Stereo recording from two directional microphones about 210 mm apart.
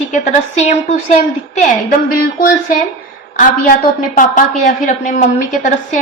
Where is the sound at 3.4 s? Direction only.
40° left (ahead or behind).